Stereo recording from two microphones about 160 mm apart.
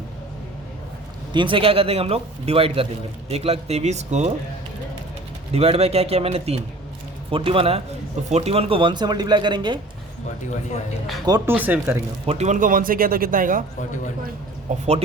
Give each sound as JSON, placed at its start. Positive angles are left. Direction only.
{"t": 1.3, "sound": "a man's voice", "side_deg": -30}
{"t": 5.5, "sound": "a man's voice", "side_deg": -40}
{"t": 11.3, "sound": "speech", "side_deg": -25}
{"t": 11.5, "sound": "speech", "side_deg": -10}
{"t": 12.2, "sound": "speech", "side_deg": -40}
{"t": 14.7, "sound": "speech", "side_deg": -50}